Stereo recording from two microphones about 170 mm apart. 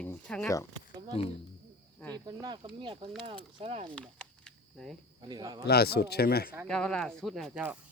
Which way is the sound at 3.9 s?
5° left (ahead or behind).